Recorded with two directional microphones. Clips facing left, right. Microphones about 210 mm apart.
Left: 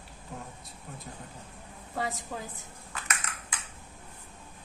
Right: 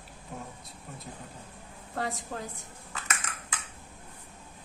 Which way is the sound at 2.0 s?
Centre (ahead or behind).